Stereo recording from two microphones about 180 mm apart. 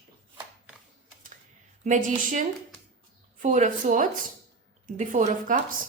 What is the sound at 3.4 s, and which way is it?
A woman's voice, 45° right (ahead or behind).